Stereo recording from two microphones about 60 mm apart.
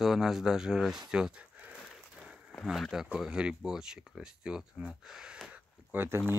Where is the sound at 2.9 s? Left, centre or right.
Centre.